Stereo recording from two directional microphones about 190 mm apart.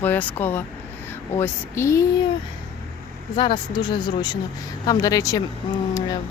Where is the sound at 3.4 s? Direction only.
25° left (ahead or behind).